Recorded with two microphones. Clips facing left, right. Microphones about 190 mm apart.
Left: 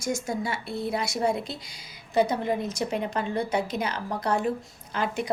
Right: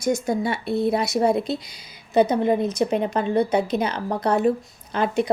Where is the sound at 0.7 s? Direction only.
60° right (ahead or behind).